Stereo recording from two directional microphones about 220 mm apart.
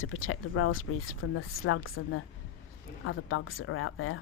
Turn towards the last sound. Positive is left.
turn(degrees=70)  # may be behind; listen again after turning